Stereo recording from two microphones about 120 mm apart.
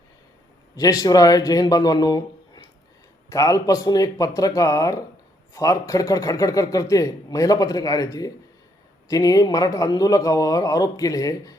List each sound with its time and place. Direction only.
0.8 s speech: 30° left (ahead or behind)